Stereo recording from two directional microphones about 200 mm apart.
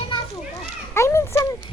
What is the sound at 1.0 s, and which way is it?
Speech, 15° left (ahead or behind).